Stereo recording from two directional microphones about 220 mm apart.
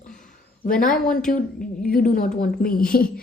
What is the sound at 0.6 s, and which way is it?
Speech, 40° left (ahead or behind).